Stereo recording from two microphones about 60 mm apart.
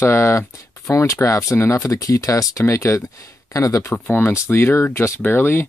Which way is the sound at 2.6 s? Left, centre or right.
Left.